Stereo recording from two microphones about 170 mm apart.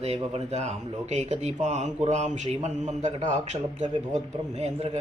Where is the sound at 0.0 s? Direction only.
35° right (ahead or behind).